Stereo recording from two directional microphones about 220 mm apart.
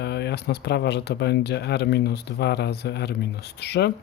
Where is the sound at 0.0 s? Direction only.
50° left (ahead or behind).